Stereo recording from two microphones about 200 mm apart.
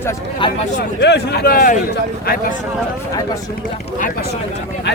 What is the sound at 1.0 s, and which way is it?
Speech, 55° left (ahead or behind).